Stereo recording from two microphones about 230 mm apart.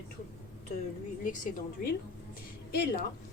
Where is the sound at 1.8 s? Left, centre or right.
Left.